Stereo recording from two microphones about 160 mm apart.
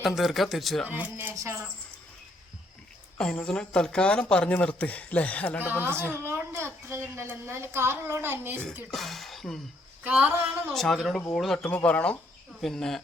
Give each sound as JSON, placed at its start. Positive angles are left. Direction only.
{"t": 0.2, "sound": "speech", "side_deg": 0}
{"t": 0.9, "sound": "a child's voice", "side_deg": -10}
{"t": 3.2, "sound": "speech", "side_deg": 5}
{"t": 5.6, "sound": "a child's voice", "side_deg": -15}
{"t": 8.9, "sound": "speech", "side_deg": 0}
{"t": 10.1, "sound": "a child's voice", "side_deg": -10}
{"t": 10.7, "sound": "speech", "side_deg": 0}